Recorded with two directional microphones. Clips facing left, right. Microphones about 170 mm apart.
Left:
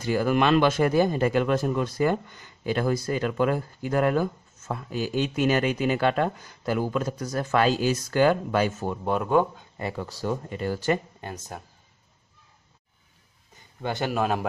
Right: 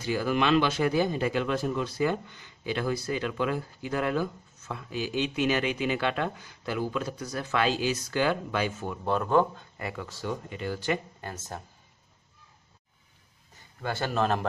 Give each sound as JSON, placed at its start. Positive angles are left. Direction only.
{"t": 0.0, "sound": "speech", "side_deg": 50}
{"t": 9.0, "sound": "speech", "side_deg": 15}
{"t": 9.8, "sound": "speech", "side_deg": 30}
{"t": 11.1, "sound": "speech", "side_deg": 15}
{"t": 13.8, "sound": "speech", "side_deg": 15}